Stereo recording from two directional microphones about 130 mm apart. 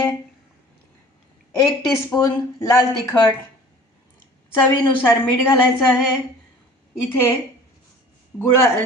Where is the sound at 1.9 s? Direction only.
25° left (ahead or behind).